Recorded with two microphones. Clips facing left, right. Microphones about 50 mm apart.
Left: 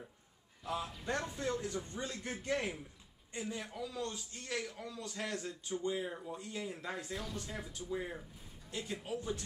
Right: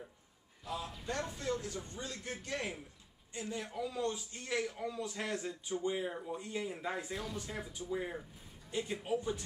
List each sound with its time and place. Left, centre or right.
1.0 s speech: left
3.4 s a man's voice: centre
3.7 s speech: centre